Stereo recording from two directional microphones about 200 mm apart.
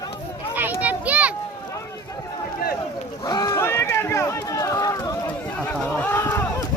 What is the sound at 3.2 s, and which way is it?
Run, 20° left (ahead or behind).